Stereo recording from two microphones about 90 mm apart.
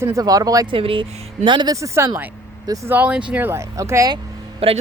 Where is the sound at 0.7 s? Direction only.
80° right.